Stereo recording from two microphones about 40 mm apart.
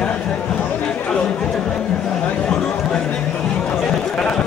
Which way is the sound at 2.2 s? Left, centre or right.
Left.